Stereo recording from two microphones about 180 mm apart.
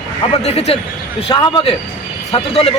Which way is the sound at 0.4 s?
35° left (ahead or behind).